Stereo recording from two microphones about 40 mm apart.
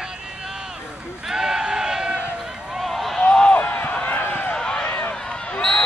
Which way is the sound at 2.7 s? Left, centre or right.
Centre.